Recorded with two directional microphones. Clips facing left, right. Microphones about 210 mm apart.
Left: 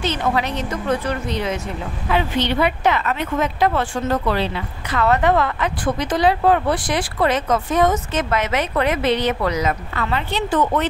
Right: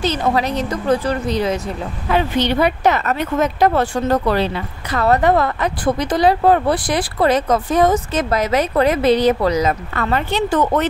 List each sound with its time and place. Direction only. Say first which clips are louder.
0.0 s a woman's voice: right 3 dB; 35° right (ahead or behind)